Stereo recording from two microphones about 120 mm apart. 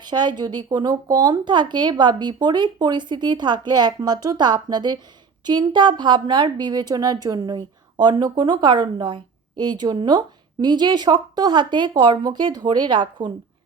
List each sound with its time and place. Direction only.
0.0 s speech: 35° right (ahead or behind)